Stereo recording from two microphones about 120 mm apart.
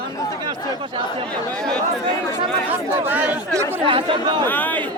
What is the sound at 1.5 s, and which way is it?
Speech, 5° left (ahead or behind).